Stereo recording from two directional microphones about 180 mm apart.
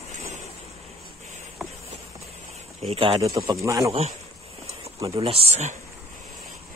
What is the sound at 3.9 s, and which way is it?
Speech, 35° right (ahead or behind).